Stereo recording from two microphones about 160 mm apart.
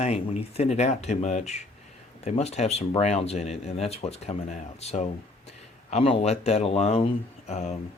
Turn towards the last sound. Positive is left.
turn(degrees=45)  # may be behind; listen again after turning